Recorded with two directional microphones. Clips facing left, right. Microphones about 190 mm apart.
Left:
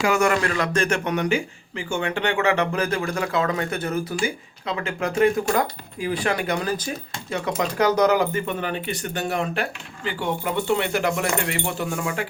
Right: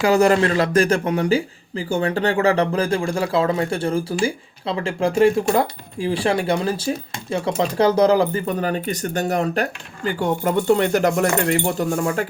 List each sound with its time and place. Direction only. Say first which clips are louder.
0.0 s speech: right 5 dB; 35° right (ahead or behind)